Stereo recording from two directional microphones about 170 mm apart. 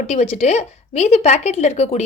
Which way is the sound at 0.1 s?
40° left (ahead or behind).